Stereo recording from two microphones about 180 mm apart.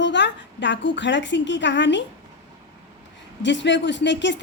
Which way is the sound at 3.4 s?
85° left.